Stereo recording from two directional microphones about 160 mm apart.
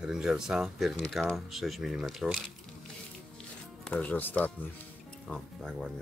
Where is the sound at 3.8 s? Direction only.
10° left (ahead or behind).